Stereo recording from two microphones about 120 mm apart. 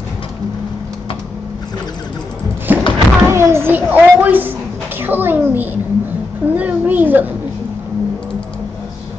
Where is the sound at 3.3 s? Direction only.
20° right (ahead or behind).